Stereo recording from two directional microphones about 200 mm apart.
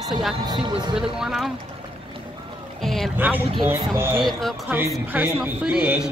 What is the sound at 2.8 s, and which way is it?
Speech, centre (ahead or behind).